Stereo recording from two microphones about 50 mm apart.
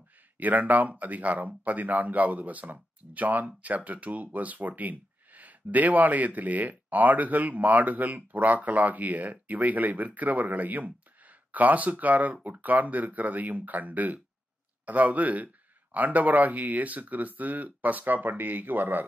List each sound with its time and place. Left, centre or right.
0.4 s speech: right